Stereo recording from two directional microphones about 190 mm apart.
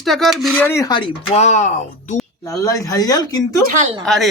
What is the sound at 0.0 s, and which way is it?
Speech, centre (ahead or behind).